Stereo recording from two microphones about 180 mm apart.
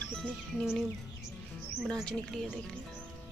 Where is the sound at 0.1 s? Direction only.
5° left (ahead or behind).